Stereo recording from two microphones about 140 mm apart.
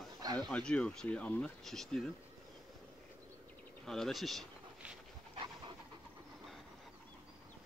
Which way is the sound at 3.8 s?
Centre (ahead or behind).